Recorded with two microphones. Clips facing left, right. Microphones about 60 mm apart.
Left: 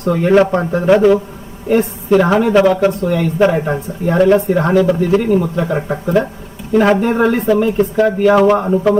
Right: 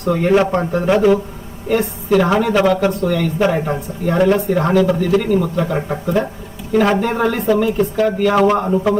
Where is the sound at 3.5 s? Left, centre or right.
Centre.